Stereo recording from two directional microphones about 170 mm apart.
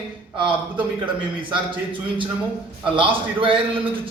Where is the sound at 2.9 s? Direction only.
30° right (ahead or behind).